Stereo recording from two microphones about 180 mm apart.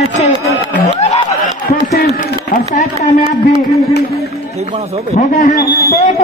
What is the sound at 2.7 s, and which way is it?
Speech, 35° left (ahead or behind).